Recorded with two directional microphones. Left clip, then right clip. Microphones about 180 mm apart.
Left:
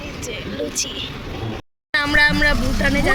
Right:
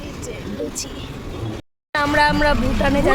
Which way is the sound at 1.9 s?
Centre (ahead or behind).